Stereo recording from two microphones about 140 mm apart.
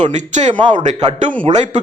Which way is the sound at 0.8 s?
55° right (ahead or behind).